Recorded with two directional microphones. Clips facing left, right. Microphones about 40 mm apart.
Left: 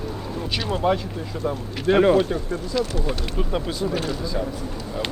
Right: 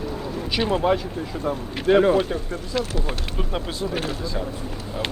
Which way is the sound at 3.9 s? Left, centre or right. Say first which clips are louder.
Left 1 dB; right.